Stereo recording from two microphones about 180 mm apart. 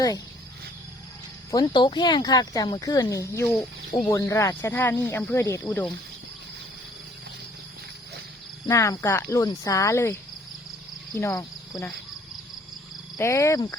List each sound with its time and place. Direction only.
1.5 s speech: 25° left (ahead or behind)
8.6 s speech: 15° left (ahead or behind)
11.2 s speech: 15° left (ahead or behind)
13.1 s speech: 15° left (ahead or behind)